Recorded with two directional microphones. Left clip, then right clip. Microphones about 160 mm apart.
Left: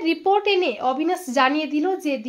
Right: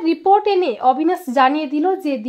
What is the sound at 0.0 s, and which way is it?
A woman's voice, 40° right (ahead or behind).